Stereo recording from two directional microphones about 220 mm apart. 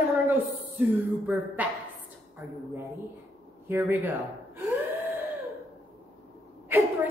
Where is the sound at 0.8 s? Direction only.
Centre (ahead or behind).